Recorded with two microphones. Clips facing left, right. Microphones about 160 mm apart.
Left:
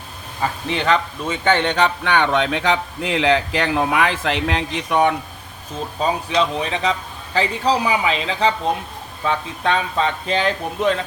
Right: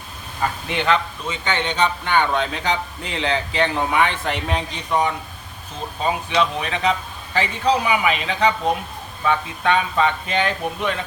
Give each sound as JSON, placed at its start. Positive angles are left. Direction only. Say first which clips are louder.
{"t": 0.7, "sound": "speech", "louder": "left 1 dB", "side_deg": 35}
{"t": 1.3, "sound": "a man's voice", "louder": "left 6 dB", "side_deg": 55}
{"t": 6.3, "sound": "speech", "louder": "left 1 dB", "side_deg": 30}